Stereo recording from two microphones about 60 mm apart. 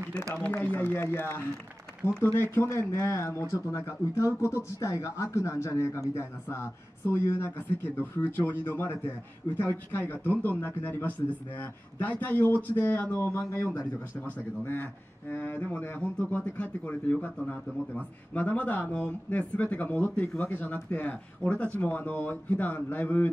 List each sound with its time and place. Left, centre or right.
0.7 s speech: left
13.1 s speech: left
14.6 s speech: left